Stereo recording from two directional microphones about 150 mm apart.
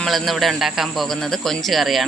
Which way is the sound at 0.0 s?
Centre (ahead or behind).